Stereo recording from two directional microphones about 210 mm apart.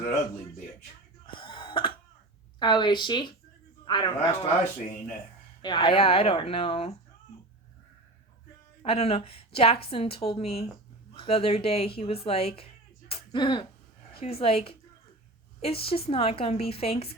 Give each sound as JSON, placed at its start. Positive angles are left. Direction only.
{"t": 1.3, "sound": "cough", "side_deg": 25}
{"t": 2.6, "sound": "a woman's voice", "side_deg": 20}
{"t": 5.6, "sound": "a woman's voice", "side_deg": 20}
{"t": 8.8, "sound": "a woman's voice", "side_deg": 25}